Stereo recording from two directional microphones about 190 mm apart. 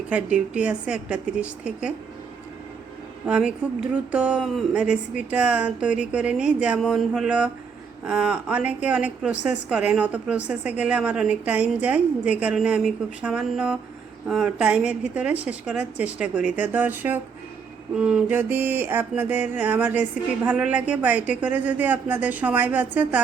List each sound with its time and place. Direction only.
0.1 s a woman's voice: 5° right (ahead or behind)
3.2 s a woman's voice: 5° right (ahead or behind)